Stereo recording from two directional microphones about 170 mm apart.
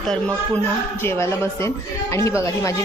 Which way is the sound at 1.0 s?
15° left (ahead or behind).